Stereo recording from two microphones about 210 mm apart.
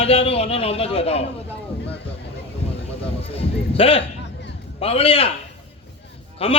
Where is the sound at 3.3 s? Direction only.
25° left (ahead or behind).